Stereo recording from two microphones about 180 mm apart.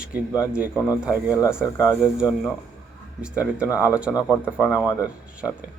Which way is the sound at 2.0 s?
5° right (ahead or behind).